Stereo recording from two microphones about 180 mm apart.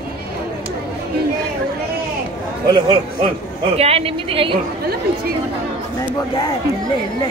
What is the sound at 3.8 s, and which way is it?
Speech, 35° right (ahead or behind).